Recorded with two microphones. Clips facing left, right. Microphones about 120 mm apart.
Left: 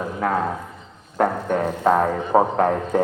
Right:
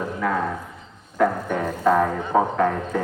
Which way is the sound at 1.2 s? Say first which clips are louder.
Even; 40° left (ahead or behind).